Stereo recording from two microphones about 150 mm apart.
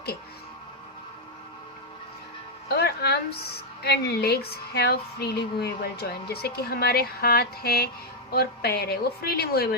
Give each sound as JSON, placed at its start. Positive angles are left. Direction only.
{"t": 2.6, "sound": "a woman's voice", "side_deg": 90}